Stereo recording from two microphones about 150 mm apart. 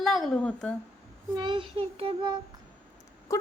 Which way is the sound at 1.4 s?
30° right (ahead or behind).